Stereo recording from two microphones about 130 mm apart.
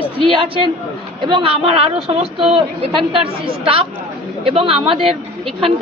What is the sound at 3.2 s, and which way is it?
A man's voice, 45° right (ahead or behind).